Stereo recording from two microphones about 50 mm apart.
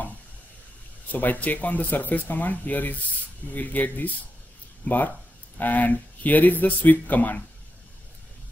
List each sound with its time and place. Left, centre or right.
1.1 s speech: left